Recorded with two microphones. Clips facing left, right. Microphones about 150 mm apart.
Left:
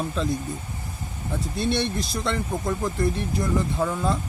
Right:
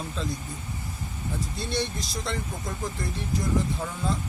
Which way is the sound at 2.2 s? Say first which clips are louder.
Left 8 dB; 60° left (ahead or behind).